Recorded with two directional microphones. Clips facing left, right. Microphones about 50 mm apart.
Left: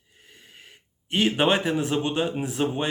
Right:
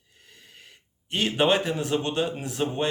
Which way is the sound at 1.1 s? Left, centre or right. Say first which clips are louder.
Left 1 dB; centre.